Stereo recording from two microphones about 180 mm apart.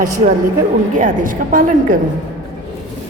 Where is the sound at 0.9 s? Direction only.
50° right (ahead or behind).